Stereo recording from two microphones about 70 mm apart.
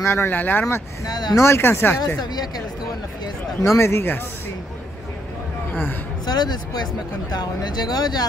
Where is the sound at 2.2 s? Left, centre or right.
Left.